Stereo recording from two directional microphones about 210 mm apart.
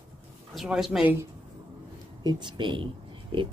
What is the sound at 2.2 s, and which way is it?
Speech, 20° right (ahead or behind).